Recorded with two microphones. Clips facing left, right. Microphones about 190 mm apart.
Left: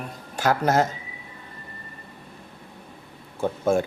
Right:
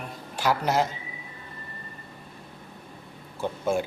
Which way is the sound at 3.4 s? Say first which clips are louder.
Left 4 dB; 45° left (ahead or behind).